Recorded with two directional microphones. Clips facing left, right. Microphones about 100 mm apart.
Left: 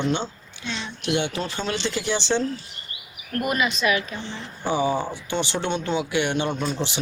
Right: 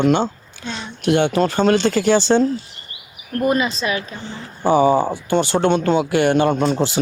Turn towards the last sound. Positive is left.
turn(degrees=-45)  # may be behind; listen again after turning